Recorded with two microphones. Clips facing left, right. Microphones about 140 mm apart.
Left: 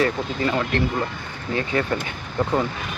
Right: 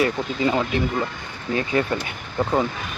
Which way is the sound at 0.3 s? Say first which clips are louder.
Right 3 dB; 15° right (ahead or behind).